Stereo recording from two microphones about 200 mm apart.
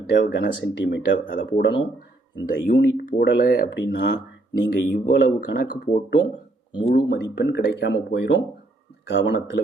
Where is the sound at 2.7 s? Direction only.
45° left (ahead or behind); by 4.2 s 60° left (ahead or behind).